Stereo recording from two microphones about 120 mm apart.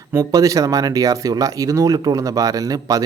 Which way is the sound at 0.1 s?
25° right (ahead or behind).